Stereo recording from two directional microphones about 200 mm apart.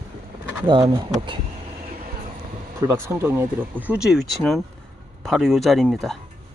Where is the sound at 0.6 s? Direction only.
25° right (ahead or behind).